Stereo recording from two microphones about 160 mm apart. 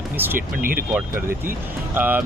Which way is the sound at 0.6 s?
65° right (ahead or behind).